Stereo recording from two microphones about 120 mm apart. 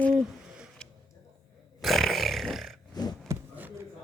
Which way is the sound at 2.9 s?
35° left (ahead or behind).